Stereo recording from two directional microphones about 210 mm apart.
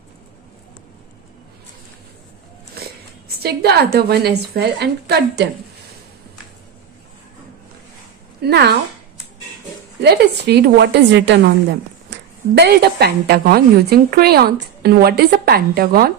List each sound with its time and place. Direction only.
3.4 s a woman's voice: 50° right (ahead or behind)
8.4 s a woman's voice: 50° right (ahead or behind)
10.0 s a woman's voice: 50° right (ahead or behind)